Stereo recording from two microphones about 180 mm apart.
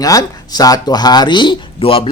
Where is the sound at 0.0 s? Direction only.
20° left (ahead or behind).